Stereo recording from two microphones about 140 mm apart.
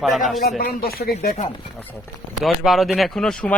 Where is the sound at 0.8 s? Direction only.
90° left.